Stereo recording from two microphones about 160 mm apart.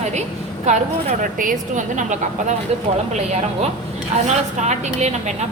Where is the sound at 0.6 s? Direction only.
50° right (ahead or behind).